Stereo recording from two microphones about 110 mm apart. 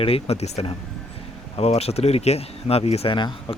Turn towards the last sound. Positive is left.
turn(degrees=50)  # may be behind; listen again after turning